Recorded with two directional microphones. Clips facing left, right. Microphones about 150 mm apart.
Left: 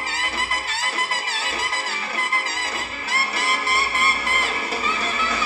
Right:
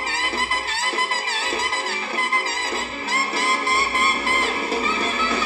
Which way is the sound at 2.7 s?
25° right (ahead or behind).